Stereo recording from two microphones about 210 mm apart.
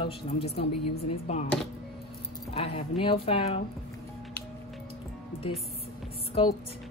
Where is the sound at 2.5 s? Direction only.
30° left (ahead or behind).